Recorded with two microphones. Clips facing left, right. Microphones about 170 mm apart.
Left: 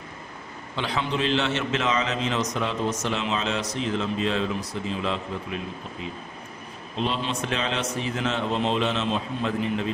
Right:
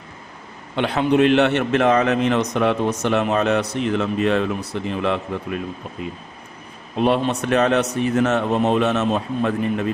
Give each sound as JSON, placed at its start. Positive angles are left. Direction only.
{"t": 0.8, "sound": "a man's voice", "side_deg": -60}
{"t": 6.9, "sound": "a man's voice", "side_deg": -55}
{"t": 9.0, "sound": "a man's voice", "side_deg": -55}